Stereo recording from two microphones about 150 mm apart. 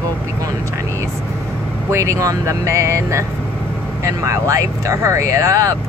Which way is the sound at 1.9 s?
20° right (ahead or behind).